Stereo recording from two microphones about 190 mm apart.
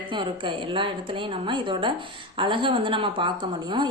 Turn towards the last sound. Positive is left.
turn(degrees=-25)  # may be behind; listen again after turning